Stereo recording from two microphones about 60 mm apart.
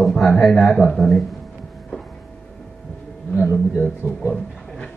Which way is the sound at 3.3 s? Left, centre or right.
Left.